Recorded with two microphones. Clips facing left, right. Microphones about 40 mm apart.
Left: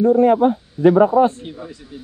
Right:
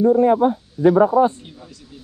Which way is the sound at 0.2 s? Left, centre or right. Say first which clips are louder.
Left 2 dB; left.